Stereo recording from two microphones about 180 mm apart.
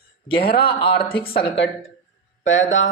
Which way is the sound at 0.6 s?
30° left (ahead or behind).